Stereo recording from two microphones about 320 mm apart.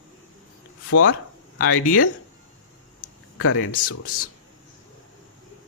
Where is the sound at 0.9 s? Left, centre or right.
Left.